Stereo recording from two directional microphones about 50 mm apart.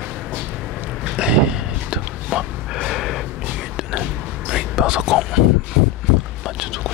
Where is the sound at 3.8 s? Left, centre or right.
Centre.